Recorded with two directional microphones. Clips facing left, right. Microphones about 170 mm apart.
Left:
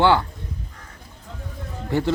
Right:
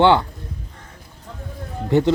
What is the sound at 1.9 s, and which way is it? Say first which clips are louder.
Speech: right 6 dB; 20° right (ahead or behind).